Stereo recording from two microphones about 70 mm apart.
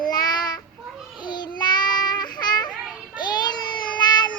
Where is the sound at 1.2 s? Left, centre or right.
Left.